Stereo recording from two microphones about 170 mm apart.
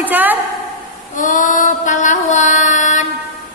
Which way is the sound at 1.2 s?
50° left (ahead or behind).